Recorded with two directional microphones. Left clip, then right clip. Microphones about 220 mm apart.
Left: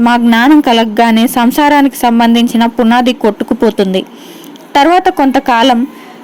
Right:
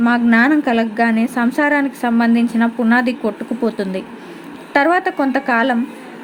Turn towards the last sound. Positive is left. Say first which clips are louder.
# left 8 dB
turn(degrees=35)  # may be behind; listen again after turning